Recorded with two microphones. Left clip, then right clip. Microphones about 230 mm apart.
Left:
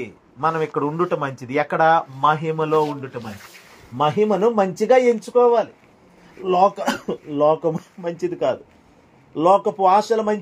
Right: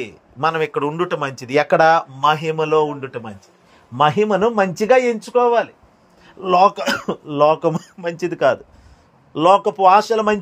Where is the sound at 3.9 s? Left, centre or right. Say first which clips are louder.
Right 3 dB; right.